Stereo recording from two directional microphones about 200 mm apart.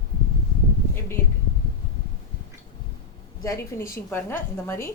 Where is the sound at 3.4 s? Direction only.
15° left (ahead or behind).